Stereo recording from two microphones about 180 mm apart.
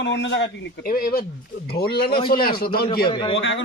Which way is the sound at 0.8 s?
55° left (ahead or behind).